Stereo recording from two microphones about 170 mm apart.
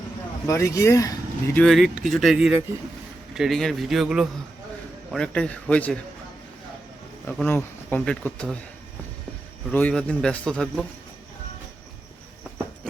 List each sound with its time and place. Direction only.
0.4 s speech: 20° left (ahead or behind)
1.5 s a man's voice: centre (ahead or behind)
7.3 s speech: 10° left (ahead or behind)
9.7 s a man's voice: 5° left (ahead or behind)